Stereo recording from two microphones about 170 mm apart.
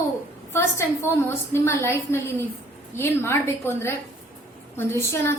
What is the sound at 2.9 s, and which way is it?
A woman's voice, 15° left (ahead or behind).